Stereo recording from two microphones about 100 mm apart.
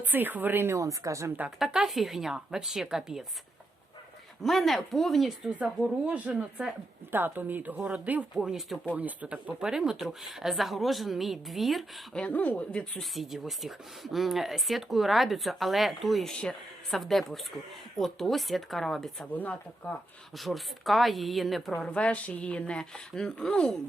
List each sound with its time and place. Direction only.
0.0 s speech: 20° right (ahead or behind)
0.8 s a woman's voice: 35° right (ahead or behind)
1.5 s speech: 5° right (ahead or behind)
4.4 s speech: centre (ahead or behind)
5.6 s speech: 10° right (ahead or behind)
7.1 s speech: 20° right (ahead or behind)
8.4 s speech: 5° right (ahead or behind)
12.2 s speech: 15° left (ahead or behind)
19.3 s speech: 15° left (ahead or behind)
20.3 s speech: centre (ahead or behind)
21.8 s speech: 10° left (ahead or behind)